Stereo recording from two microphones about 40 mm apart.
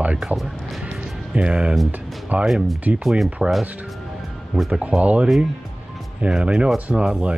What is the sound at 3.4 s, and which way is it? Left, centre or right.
Speech, centre.